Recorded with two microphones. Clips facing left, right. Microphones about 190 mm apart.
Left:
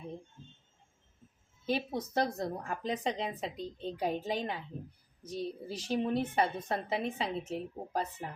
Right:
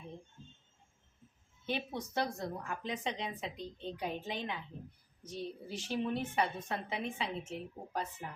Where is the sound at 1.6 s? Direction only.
35° left (ahead or behind).